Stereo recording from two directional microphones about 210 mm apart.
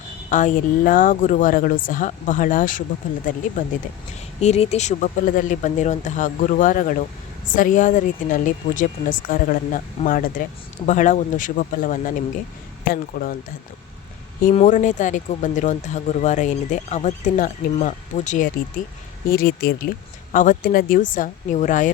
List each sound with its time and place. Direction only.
0.3 s speech: 35° left (ahead or behind)
14.5 s speech: 35° left (ahead or behind)